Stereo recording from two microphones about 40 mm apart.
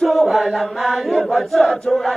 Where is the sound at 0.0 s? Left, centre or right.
Centre.